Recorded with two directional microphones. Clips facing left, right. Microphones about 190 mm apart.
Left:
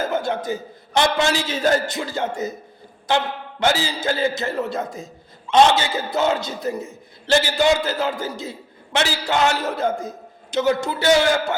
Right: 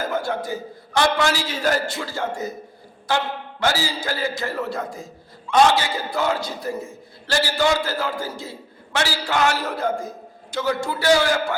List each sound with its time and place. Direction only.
0.0 s a man's voice: 20° left (ahead or behind)